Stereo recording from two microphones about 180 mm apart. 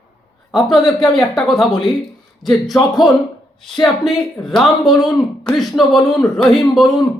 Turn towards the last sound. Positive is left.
turn(degrees=0)  # may be behind; listen again after turning